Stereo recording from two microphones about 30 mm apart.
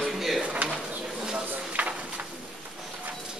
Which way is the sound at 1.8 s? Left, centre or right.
Right.